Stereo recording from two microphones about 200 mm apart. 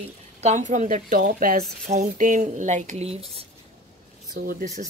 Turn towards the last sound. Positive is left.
turn(degrees=-35)  # may be behind; listen again after turning